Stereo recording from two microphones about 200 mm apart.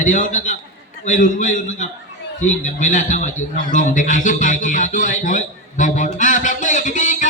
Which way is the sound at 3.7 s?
40° left (ahead or behind).